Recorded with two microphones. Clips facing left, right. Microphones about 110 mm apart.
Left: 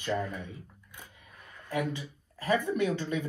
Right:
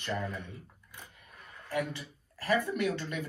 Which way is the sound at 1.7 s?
15° left (ahead or behind).